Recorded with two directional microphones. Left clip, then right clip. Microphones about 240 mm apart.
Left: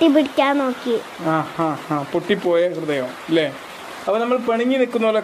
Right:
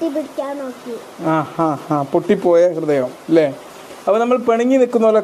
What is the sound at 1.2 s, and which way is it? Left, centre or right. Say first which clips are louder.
Speech: right 5 dB; centre.